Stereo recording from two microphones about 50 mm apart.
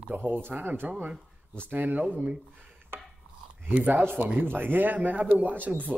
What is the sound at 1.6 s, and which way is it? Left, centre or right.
Mantra, right.